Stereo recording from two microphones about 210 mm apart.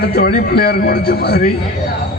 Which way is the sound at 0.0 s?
45° left (ahead or behind).